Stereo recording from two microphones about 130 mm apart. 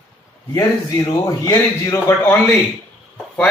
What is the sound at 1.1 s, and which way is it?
A man's voice, 25° left (ahead or behind).